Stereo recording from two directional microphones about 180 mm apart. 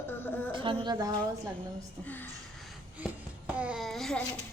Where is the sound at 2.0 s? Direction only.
10° left (ahead or behind).